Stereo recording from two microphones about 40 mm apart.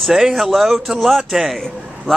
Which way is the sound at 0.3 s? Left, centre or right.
Centre.